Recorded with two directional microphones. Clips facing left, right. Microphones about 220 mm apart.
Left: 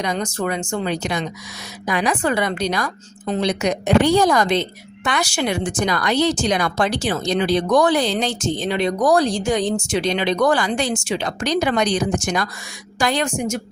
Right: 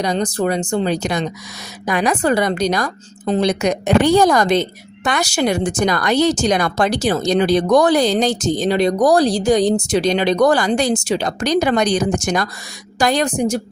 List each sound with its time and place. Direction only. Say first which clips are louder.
0.0 s a woman's voice: right 4 dB; 35° right (ahead or behind)